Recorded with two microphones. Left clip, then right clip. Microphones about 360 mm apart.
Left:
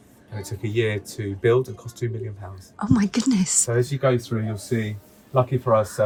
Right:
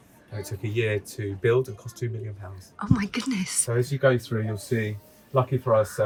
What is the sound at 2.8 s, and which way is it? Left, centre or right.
Speech, centre.